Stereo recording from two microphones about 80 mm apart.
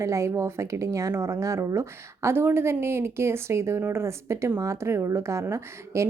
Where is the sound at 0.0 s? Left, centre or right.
Right.